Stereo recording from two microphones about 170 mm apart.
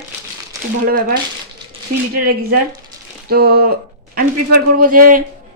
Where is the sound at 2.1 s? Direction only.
60° right (ahead or behind).